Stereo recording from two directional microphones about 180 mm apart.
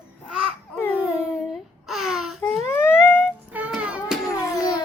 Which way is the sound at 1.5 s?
Centre (ahead or behind).